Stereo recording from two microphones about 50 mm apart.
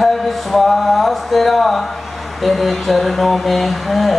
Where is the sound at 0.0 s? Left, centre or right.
Centre.